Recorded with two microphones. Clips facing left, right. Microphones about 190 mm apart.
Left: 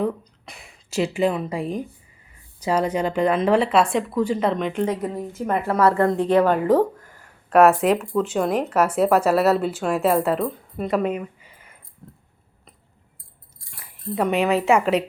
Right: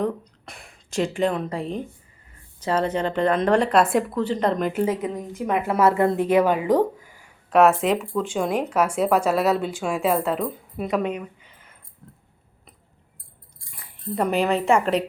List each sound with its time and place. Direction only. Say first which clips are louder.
0.0 s a woman's voice: left 1 dB; centre (ahead or behind)
12.0 s a sound: left 3 dB; 25° left (ahead or behind)
13.7 s speech: left 1 dB; centre (ahead or behind)